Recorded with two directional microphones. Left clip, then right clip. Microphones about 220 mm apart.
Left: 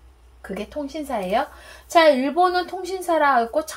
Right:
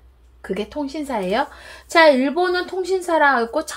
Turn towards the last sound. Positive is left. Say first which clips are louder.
# right 1 dB
turn(degrees=-45)  # may be behind; listen again after turning